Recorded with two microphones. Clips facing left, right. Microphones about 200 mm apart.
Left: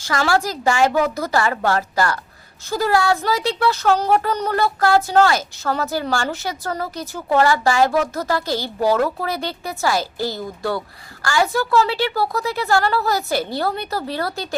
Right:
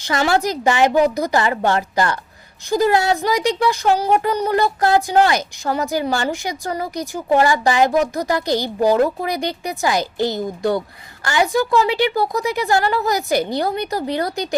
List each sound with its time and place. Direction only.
0.0 s a woman's voice: 20° right (ahead or behind)